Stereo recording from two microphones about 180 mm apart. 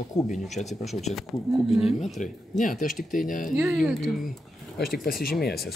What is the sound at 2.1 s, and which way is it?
Speech, 40° left (ahead or behind).